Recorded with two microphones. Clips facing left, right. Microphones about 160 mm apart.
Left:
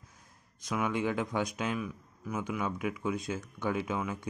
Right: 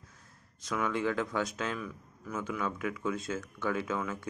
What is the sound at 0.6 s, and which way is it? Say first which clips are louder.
Speech: left 1 dB; 15° left (ahead or behind).